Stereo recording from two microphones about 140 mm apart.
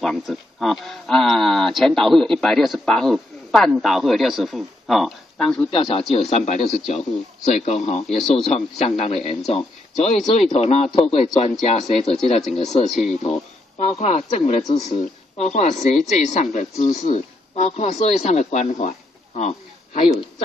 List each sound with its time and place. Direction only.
0.0 s speech: centre (ahead or behind)
5.7 s speech: 35° left (ahead or behind)
6.3 s a man's voice: 55° left (ahead or behind)